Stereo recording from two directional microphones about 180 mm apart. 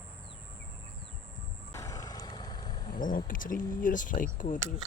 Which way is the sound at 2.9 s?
50° left (ahead or behind).